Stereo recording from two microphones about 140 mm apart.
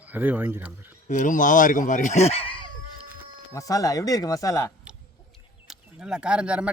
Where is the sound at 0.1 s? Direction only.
10° right (ahead or behind).